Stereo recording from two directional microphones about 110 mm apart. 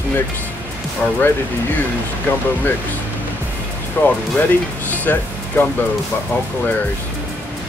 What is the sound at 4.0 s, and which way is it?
Speech, 20° left (ahead or behind).